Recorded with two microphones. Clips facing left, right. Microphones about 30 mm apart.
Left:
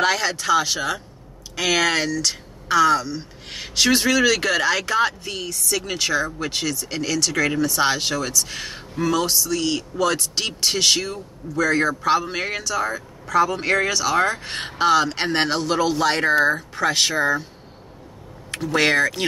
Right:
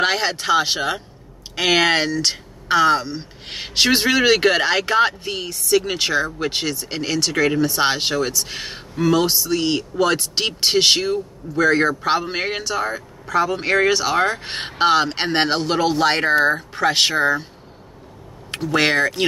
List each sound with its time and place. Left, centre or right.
0.0 s speech: right
18.5 s a sound: right
18.8 s speech: centre